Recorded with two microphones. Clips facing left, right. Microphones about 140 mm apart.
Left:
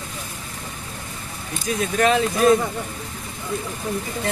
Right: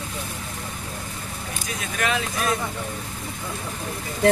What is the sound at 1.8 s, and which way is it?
Speech, 35° left (ahead or behind).